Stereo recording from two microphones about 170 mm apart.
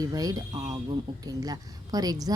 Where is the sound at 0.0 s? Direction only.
20° right (ahead or behind).